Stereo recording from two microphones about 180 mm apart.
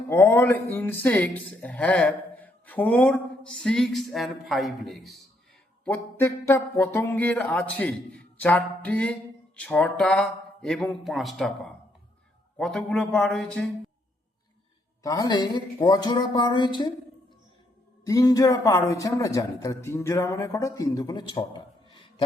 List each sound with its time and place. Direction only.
0.1 s speech: 15° left (ahead or behind)
5.8 s speech: 10° left (ahead or behind)
15.0 s speech: 20° left (ahead or behind)
18.0 s speech: 20° left (ahead or behind)